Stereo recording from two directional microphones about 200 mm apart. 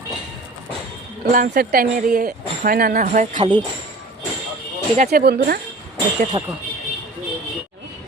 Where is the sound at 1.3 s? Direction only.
50° right (ahead or behind).